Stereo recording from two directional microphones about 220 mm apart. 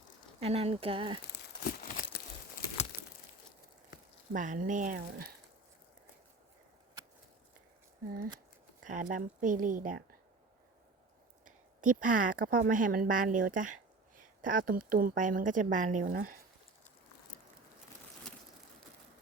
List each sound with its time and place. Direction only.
0.3 s speech: 25° right (ahead or behind)
1.4 s crumpling: 45° left (ahead or behind)
4.3 s speech: 35° right (ahead or behind)
8.8 s speech: 35° right (ahead or behind)
11.4 s speech: 35° right (ahead or behind)